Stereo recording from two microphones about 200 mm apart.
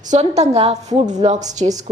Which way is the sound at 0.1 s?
35° right (ahead or behind).